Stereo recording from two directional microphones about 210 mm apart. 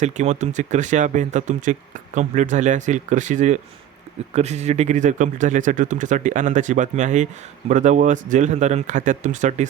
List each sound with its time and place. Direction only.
0.0 s speech: 35° right (ahead or behind)